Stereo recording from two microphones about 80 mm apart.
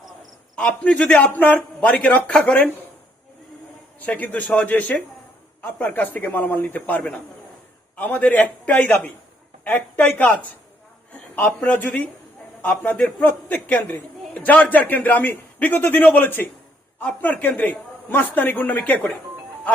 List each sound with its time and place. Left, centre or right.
0.5 s a man's voice: centre
4.0 s a man's voice: centre